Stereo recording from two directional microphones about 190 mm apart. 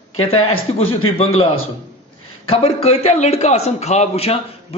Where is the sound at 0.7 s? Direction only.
30° left (ahead or behind).